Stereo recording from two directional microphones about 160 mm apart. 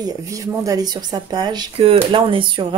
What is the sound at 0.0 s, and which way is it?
Speech, 20° right (ahead or behind).